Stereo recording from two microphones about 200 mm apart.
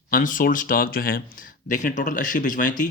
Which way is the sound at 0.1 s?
40° left (ahead or behind).